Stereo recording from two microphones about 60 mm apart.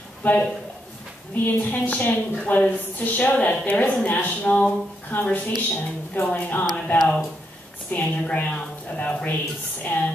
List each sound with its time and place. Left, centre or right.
0.2 s a man's voice: left